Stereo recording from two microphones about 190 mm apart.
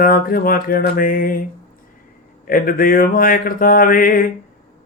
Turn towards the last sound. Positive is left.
turn(degrees=45)  # may be behind; listen again after turning